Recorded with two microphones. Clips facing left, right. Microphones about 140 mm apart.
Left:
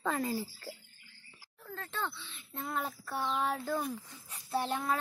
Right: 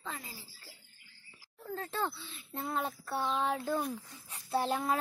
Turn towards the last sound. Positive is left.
turn(degrees=0)  # may be behind; listen again after turning